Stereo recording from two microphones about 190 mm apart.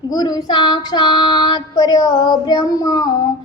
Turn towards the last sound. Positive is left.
turn(degrees=20)  # may be behind; listen again after turning